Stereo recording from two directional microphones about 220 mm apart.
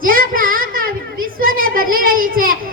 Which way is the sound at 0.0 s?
40° right (ahead or behind).